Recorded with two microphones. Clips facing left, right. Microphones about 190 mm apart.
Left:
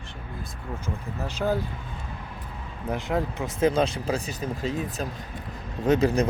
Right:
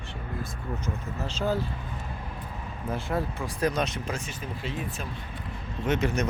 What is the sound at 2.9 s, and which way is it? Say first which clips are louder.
Speech: left 3 dB; 15° left (ahead or behind).